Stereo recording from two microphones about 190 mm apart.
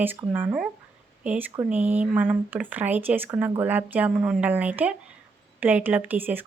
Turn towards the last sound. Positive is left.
turn(degrees=-10)  # may be behind; listen again after turning